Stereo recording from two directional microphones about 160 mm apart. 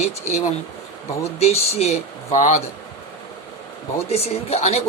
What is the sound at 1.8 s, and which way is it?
Speech, 45° left (ahead or behind).